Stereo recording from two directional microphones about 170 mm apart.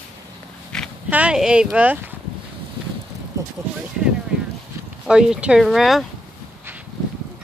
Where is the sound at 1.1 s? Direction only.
5° right (ahead or behind).